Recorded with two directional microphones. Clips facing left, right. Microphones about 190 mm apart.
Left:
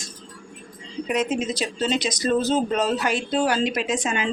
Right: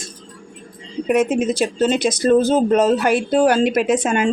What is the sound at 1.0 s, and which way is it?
Speech, 50° right (ahead or behind).